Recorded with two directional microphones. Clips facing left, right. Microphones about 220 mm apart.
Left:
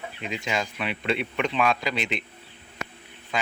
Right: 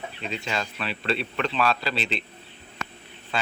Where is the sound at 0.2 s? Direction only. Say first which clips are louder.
Left 2 dB; 15° left (ahead or behind).